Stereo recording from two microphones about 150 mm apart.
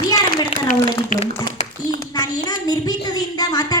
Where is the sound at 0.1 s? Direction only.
25° left (ahead or behind).